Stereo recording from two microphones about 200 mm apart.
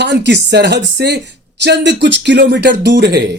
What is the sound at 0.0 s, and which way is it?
Speech, 60° right (ahead or behind).